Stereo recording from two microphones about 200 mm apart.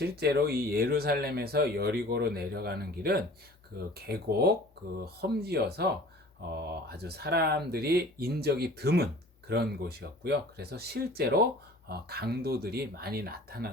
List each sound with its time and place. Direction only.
0.0 s speech: 50° right (ahead or behind)